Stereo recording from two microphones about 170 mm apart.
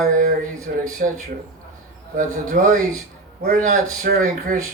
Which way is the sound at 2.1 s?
50° right (ahead or behind).